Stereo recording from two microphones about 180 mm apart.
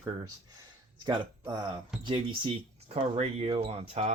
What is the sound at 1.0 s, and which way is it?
Speech, 25° right (ahead or behind).